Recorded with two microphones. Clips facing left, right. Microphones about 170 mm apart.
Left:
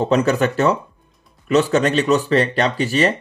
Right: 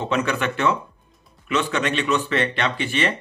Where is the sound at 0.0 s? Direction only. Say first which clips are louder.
Left 7 dB; 40° left (ahead or behind).